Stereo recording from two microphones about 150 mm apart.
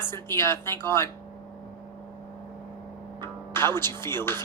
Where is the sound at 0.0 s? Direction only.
15° left (ahead or behind).